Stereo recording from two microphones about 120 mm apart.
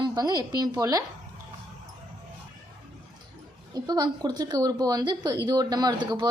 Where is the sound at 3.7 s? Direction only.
30° right (ahead or behind).